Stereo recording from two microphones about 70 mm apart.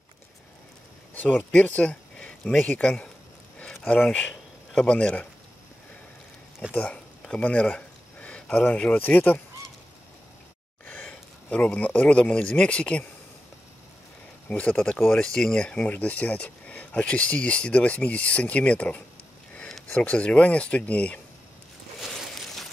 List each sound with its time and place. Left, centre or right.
1.1 s speech: left
6.7 s speech: centre
11.4 s speech: left
14.5 s speech: centre
22.0 s a sound: centre